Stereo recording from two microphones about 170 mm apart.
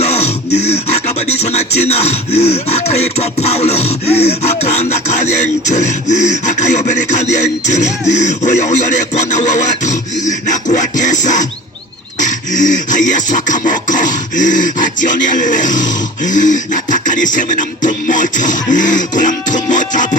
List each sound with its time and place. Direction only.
0.0 s beatboxing: 40° left (ahead or behind)